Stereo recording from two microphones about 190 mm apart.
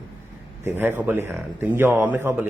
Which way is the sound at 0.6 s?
10° right (ahead or behind).